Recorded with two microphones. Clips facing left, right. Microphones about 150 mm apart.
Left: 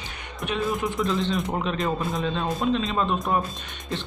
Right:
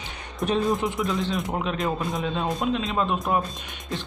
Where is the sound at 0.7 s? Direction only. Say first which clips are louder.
Right 2 dB; 20° right (ahead or behind).